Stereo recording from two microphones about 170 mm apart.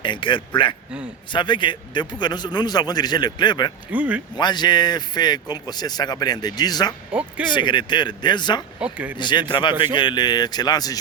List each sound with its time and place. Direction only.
0.0 s speech: 30° left (ahead or behind)
3.9 s speech: 10° right (ahead or behind)
4.4 s speech: 25° left (ahead or behind)
7.1 s speech: 10° right (ahead or behind)
7.5 s speech: 25° left (ahead or behind)
8.8 s speech: 10° right (ahead or behind)
9.1 s speech: 25° left (ahead or behind)